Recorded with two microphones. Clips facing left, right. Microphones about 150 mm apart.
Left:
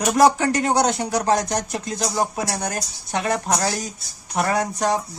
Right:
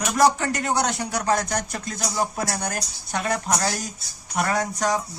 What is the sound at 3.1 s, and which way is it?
Speech, 25° left (ahead or behind).